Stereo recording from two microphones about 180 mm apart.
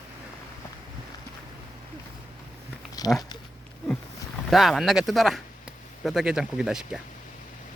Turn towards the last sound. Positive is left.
turn(degrees=-5)  # may be behind; listen again after turning